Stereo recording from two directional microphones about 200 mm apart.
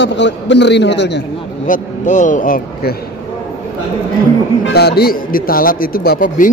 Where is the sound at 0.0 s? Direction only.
60° left (ahead or behind).